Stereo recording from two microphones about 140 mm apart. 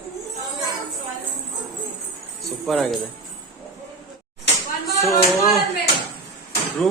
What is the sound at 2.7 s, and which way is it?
Speech, 5° left (ahead or behind).